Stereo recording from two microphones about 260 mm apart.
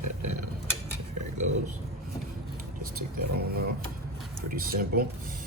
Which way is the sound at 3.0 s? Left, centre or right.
Right.